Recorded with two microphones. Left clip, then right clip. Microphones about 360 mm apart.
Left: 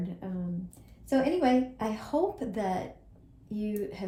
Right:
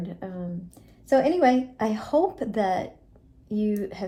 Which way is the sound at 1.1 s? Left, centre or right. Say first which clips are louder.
Right 6 dB; right.